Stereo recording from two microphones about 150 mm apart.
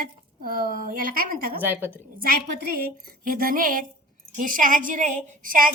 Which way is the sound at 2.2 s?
85° right.